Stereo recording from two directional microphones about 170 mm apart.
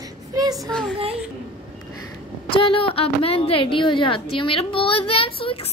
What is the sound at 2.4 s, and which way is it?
A woman's voice, 30° left (ahead or behind).